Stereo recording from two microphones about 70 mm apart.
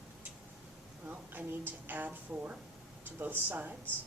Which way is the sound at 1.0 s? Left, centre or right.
Right.